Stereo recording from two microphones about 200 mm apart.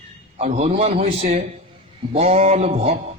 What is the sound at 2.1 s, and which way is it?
Speech, 30° right (ahead or behind).